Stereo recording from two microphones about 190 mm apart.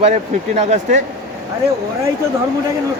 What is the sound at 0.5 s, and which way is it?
Speech, 35° right (ahead or behind).